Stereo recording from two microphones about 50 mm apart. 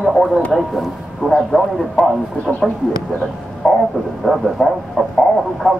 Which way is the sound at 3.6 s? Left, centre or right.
Centre.